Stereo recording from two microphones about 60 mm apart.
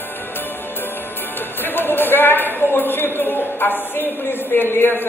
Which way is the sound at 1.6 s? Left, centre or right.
Left.